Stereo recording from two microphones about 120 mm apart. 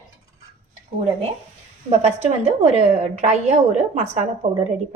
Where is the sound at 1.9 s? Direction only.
60° right (ahead or behind).